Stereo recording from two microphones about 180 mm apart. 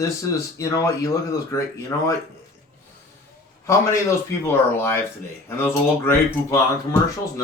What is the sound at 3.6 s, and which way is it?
Speech, 15° left (ahead or behind).